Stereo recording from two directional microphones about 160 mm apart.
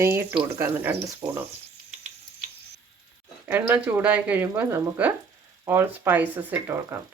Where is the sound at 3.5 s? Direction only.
10° right (ahead or behind).